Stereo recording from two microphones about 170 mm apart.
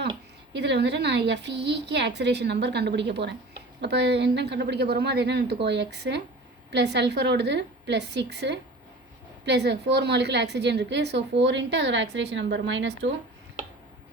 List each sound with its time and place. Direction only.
0.5 s a woman's voice: 90° right